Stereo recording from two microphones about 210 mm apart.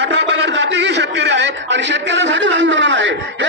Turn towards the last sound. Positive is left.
turn(degrees=-60)  # may be behind; listen again after turning